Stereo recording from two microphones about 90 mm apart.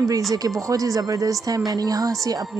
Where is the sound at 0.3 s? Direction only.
40° right (ahead or behind).